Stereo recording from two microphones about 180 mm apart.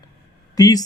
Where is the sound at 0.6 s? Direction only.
20° left (ahead or behind).